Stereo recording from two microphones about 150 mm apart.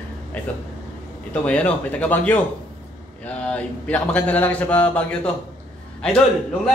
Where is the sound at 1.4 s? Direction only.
10° left (ahead or behind).